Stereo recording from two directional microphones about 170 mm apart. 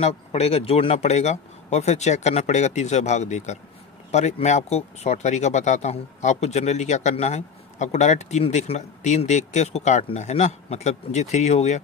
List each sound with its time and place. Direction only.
0.0 s speech: 40° left (ahead or behind)